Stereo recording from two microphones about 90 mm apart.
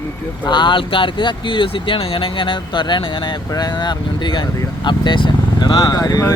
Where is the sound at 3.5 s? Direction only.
50° left (ahead or behind).